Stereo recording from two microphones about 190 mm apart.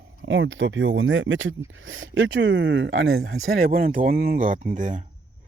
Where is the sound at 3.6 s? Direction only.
50° right (ahead or behind).